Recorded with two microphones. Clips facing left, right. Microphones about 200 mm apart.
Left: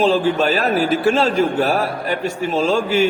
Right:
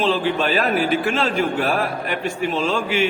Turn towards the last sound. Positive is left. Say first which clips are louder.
# left 4 dB
turn(degrees=40)  # may be behind; listen again after turning